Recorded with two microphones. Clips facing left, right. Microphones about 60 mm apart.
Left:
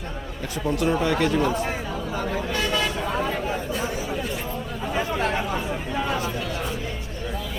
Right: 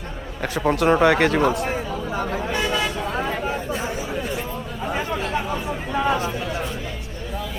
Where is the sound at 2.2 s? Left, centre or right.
Centre.